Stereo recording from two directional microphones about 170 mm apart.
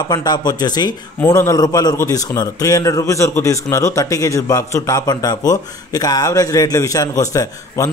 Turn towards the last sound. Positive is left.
turn(degrees=20)  # may be behind; listen again after turning